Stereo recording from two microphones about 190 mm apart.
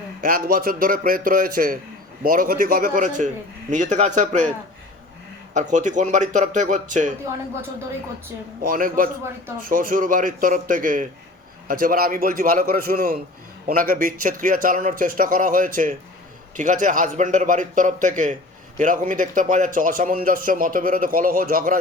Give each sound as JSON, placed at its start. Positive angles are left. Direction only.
{"t": 0.2, "sound": "speech", "side_deg": -50}
{"t": 5.5, "sound": "speech", "side_deg": -40}
{"t": 8.6, "sound": "speech", "side_deg": -50}